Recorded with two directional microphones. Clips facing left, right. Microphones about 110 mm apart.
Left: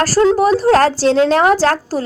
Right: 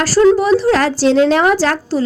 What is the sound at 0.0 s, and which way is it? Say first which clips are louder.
A woman's voice: right 1 dB; 45° left (ahead or behind).